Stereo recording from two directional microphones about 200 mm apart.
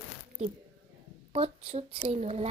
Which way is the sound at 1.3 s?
30° right (ahead or behind).